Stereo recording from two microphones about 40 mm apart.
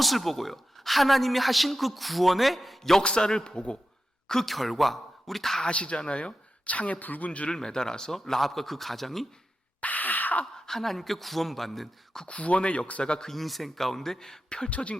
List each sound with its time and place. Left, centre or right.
0.0 s a woman's voice: centre
3.0 s speech: centre
4.3 s a woman's voice: centre
5.6 s speech: left
7.3 s speech: left
7.5 s a woman's voice: centre
9.8 s a sound: left
10.5 s a woman's voice: centre
12.3 s speech: left
13.2 s speech: centre
14.7 s speech: left